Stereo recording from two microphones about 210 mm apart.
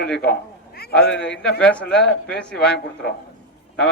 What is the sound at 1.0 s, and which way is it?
Speech, 55° left (ahead or behind).